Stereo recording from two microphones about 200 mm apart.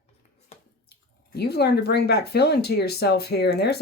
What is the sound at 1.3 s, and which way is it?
Speech, 55° left (ahead or behind).